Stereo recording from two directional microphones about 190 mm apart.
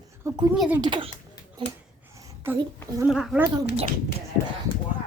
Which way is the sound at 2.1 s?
15° right (ahead or behind).